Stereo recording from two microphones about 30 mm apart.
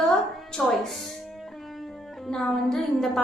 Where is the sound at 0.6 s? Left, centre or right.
Centre.